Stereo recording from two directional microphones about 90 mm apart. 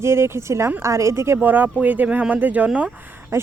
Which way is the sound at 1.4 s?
20° right (ahead or behind).